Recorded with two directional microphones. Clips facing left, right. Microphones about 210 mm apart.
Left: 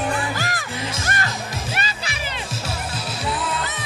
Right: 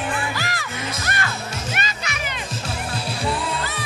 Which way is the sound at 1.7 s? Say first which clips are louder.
Even; 30° left (ahead or behind).